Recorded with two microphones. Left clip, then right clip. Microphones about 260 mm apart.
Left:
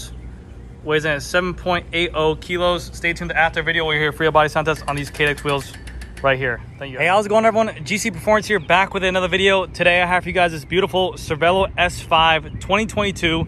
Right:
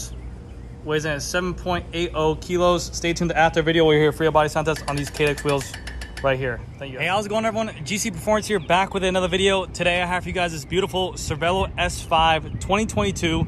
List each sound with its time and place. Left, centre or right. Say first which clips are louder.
0.8 s speech: left 5 dB; centre